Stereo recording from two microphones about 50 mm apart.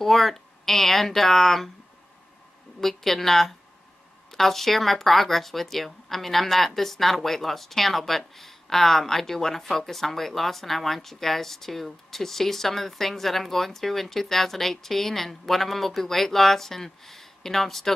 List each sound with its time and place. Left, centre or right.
0.0 s speech: centre
2.8 s speech: centre